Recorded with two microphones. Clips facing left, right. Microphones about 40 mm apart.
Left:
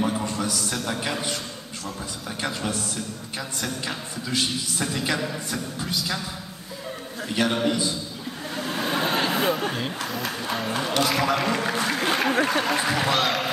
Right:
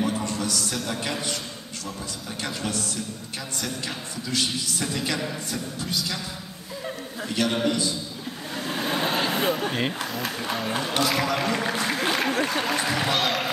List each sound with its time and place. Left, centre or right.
0.0 s a sound: centre
0.7 s a man's voice: centre
2.4 s a man's voice: centre
7.4 s a man's voice: centre
8.5 s vehicle: centre
10.0 s speech: centre